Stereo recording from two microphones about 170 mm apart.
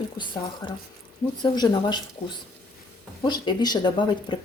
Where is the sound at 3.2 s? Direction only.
25° left (ahead or behind).